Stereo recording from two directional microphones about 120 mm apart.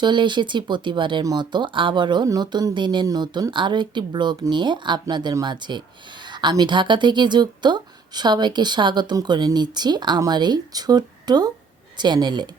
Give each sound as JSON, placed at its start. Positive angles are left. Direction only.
{"t": 0.0, "sound": "speech", "side_deg": -40}